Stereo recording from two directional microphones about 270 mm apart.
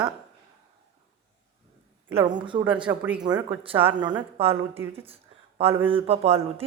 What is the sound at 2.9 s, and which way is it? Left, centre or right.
A woman's voice, centre.